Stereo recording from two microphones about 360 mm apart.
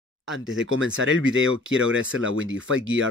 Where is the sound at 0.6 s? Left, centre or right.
Right.